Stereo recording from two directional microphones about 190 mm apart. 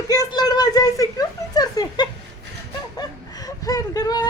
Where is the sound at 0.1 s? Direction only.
20° left (ahead or behind).